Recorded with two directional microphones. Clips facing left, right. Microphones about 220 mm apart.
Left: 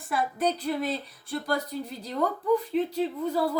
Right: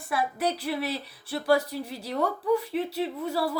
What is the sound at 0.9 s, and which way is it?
Speech, 80° right.